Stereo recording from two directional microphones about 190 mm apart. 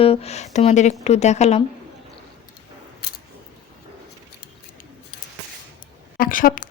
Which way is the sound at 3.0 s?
55° left (ahead or behind).